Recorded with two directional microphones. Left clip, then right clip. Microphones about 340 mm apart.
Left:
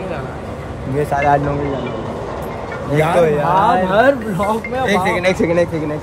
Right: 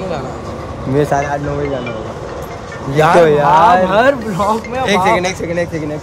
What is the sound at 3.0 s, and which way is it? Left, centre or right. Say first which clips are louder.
Speech: right 5 dB; right.